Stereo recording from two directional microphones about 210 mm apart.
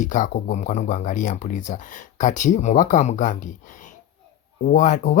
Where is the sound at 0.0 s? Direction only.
40° left (ahead or behind).